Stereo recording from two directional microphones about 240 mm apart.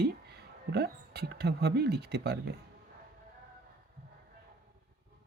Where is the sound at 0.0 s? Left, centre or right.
Right.